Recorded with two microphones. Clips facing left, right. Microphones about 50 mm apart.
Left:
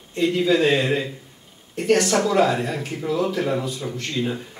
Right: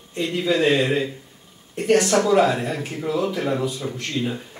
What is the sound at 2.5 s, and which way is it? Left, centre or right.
Speech, centre.